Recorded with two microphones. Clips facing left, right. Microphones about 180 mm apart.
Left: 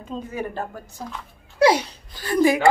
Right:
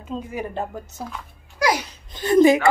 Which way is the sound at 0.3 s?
20° right (ahead or behind).